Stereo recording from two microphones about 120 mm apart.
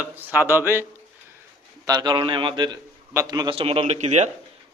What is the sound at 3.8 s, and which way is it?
Speech, 70° right (ahead or behind).